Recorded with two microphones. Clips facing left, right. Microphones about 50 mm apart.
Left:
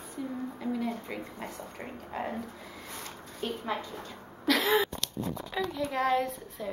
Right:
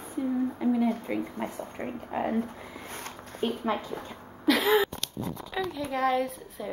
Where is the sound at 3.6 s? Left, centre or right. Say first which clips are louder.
Right 4 dB; centre.